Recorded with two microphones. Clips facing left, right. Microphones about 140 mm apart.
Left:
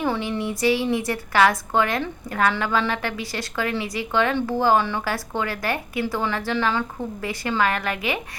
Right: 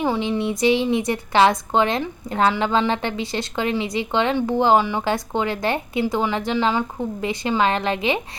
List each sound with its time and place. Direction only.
0.0 s a woman's voice: 15° right (ahead or behind)